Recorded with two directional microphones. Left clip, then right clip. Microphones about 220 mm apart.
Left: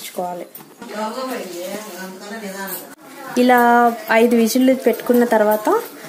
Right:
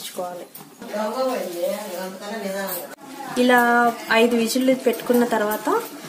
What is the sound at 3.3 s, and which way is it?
Speech, 30° left (ahead or behind).